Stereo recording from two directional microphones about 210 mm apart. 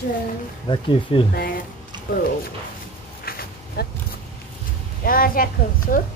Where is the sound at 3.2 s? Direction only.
45° left (ahead or behind).